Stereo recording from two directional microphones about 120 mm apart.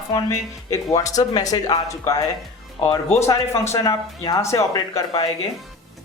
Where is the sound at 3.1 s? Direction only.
25° left (ahead or behind).